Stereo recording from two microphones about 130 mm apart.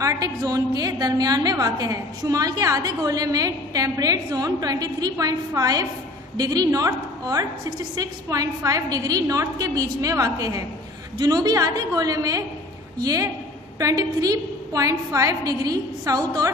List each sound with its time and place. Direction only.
0.0 s a woman's voice: 25° right (ahead or behind)